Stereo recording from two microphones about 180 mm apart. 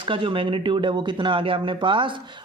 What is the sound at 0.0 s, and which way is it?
Speech, 30° right (ahead or behind).